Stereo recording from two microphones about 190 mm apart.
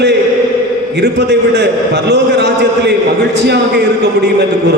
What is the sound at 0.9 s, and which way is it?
A man's voice, 60° right (ahead or behind).